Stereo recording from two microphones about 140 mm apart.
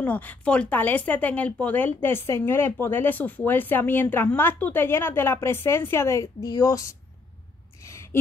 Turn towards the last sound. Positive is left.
turn(degrees=25)  # may be behind; listen again after turning